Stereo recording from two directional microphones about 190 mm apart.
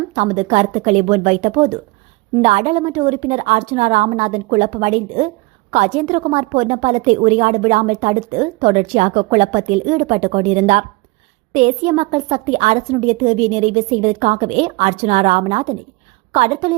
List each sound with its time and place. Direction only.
0.1 s a woman's voice: 35° right (ahead or behind)